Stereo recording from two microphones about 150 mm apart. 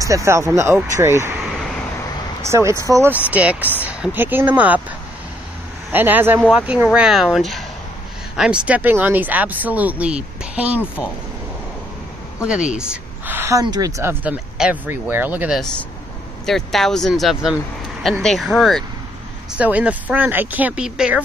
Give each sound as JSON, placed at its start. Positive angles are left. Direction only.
{"t": 0.0, "sound": "speech", "side_deg": -20}
{"t": 2.4, "sound": "speech", "side_deg": -20}
{"t": 5.9, "sound": "speech", "side_deg": -10}
{"t": 12.4, "sound": "speech", "side_deg": -5}
{"t": 16.4, "sound": "speech", "side_deg": 0}